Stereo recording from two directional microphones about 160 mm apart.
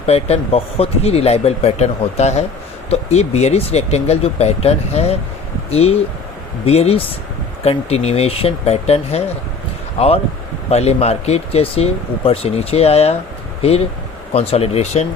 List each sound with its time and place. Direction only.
0.0 s speech: 40° left (ahead or behind)
10.7 s speech: 40° left (ahead or behind)